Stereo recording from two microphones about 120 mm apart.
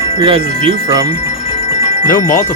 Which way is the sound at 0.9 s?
30° right (ahead or behind).